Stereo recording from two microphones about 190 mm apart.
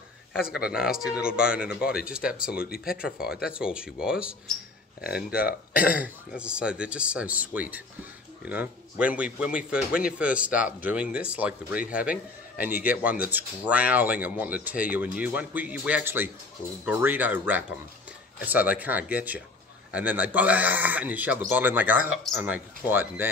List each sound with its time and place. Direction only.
0.7 s speech: 5° right (ahead or behind)
2.3 s speech: 50° left (ahead or behind)
2.8 s speech: 5° right (ahead or behind)
5.3 s speech: 50° left (ahead or behind)
5.9 s speech: 5° right (ahead or behind)